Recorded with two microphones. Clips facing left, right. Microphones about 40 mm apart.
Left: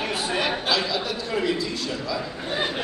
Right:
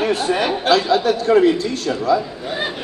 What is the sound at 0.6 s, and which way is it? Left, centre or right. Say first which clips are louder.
A man's voice: right 9 dB; right.